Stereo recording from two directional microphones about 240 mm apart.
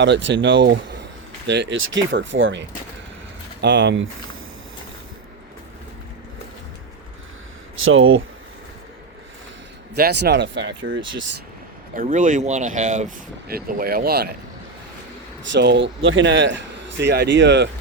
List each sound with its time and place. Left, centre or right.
0.0 s speech: right
7.9 s speech: right
9.9 s speech: right
11.9 s speech: right
15.5 s speech: right